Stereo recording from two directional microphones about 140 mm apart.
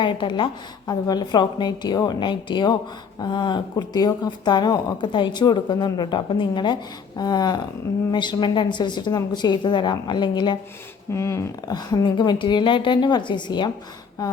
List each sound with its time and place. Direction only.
0.0 s speech: 35° left (ahead or behind)
7.2 s a sound: 30° left (ahead or behind)
8.1 s speech: 30° left (ahead or behind)
11.1 s speech: 20° left (ahead or behind)